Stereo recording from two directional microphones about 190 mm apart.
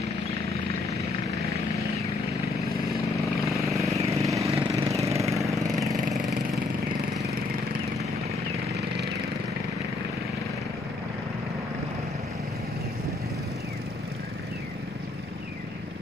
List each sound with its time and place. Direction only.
3.4 s vehicle: centre (ahead or behind)
4.0 s vehicle: 15° right (ahead or behind)
4.5 s vehicle: 30° right (ahead or behind)
4.8 s vehicle: 15° right (ahead or behind)
5.3 s lawn mower: 15° right (ahead or behind)